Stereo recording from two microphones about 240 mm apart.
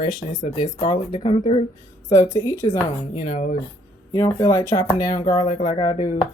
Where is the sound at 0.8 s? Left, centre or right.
Left.